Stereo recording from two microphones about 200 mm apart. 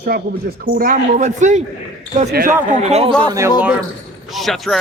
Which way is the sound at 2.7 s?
35° right (ahead or behind).